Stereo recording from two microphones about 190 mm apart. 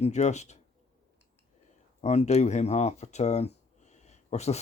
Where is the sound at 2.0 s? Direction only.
35° left (ahead or behind).